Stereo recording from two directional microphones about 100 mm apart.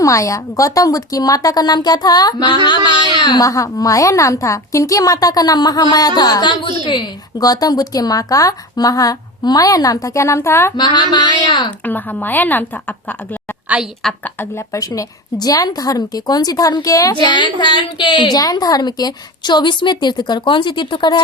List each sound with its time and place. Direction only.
0.0 s speech: 35° left (ahead or behind); by 3.4 s 50° left (ahead or behind)
3.4 s speech: 35° left (ahead or behind)
10.8 s a woman's voice: 50° left (ahead or behind)
11.9 s a woman's voice: 20° left (ahead or behind)
14.3 s speech: 30° left (ahead or behind)
17.2 s a woman's voice: 50° left (ahead or behind)